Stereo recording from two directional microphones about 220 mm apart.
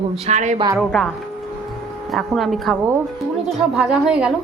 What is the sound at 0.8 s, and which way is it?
Speech, centre (ahead or behind).